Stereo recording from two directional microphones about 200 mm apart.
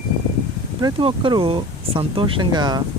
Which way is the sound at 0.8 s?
25° right (ahead or behind).